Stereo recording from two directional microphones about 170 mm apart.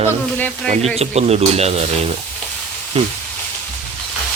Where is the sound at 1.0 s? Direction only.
40° right (ahead or behind).